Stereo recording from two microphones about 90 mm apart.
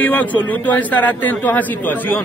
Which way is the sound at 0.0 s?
20° left (ahead or behind).